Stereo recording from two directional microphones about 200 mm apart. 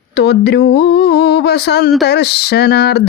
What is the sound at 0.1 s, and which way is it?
Mantra, 55° left (ahead or behind).